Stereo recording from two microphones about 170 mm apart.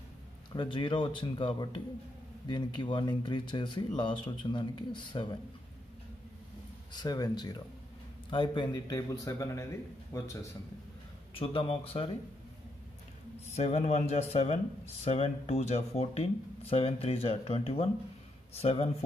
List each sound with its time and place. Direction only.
0.6 s speech: 30° left (ahead or behind)
6.9 s speech: 25° left (ahead or behind)
11.3 s speech: 30° left (ahead or behind)
13.6 s speech: 40° left (ahead or behind)